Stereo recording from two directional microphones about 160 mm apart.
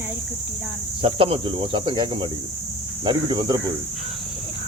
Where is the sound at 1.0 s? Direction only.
35° right (ahead or behind).